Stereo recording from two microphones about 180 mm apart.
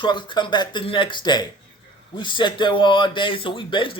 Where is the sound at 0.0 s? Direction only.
25° left (ahead or behind).